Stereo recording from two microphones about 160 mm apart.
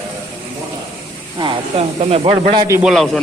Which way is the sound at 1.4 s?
35° right (ahead or behind).